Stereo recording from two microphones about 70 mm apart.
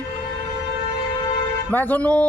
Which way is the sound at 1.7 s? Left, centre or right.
Left.